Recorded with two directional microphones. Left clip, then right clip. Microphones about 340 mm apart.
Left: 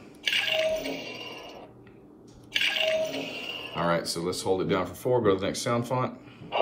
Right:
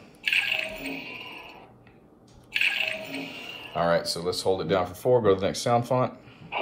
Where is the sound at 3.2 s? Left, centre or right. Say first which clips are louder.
Left 3 dB; centre.